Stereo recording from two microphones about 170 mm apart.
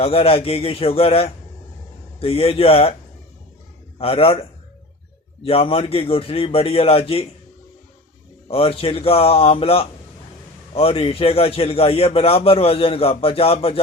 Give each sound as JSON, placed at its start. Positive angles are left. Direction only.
{"t": 0.0, "sound": "a man's voice", "side_deg": 35}
{"t": 3.9, "sound": "a man's voice", "side_deg": 35}
{"t": 8.4, "sound": "a man's voice", "side_deg": 35}